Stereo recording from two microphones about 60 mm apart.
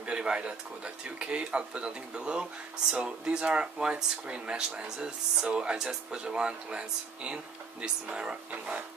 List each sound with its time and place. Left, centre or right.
0.0 s speech: centre